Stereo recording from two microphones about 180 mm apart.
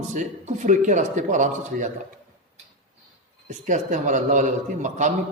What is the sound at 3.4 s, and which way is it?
A man's voice, 45° right (ahead or behind).